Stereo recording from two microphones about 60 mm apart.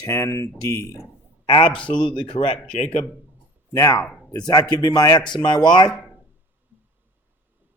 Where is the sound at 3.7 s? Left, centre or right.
Left.